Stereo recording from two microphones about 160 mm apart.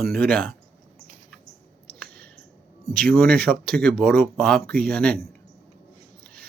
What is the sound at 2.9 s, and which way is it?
Speech, 5° left (ahead or behind).